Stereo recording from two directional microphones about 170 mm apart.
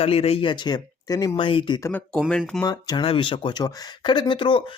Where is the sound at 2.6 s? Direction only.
25° left (ahead or behind).